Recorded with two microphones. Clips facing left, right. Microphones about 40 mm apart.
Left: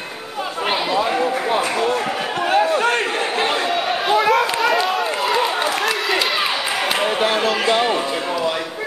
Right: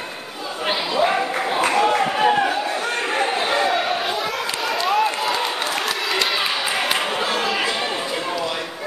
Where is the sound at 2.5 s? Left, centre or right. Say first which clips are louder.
Left 7 dB; left.